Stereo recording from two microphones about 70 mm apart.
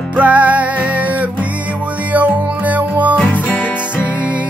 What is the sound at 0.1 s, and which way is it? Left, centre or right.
Music, right.